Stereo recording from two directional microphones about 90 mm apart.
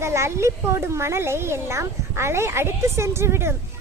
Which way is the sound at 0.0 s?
30° right (ahead or behind).